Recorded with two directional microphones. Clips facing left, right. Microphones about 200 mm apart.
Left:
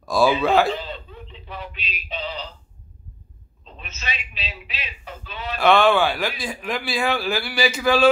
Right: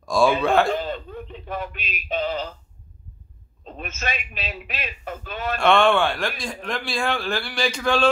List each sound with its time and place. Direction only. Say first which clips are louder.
0.0 s a man's voice: even; 5° left (ahead or behind)
0.7 s male singing: right 2 dB; 50° right (ahead or behind)
3.6 s speech: right 5 dB; 50° right (ahead or behind)
5.6 s a man's voice: left 1 dB; centre (ahead or behind)